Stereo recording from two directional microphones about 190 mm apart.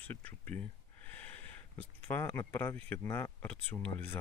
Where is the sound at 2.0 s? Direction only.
10° left (ahead or behind).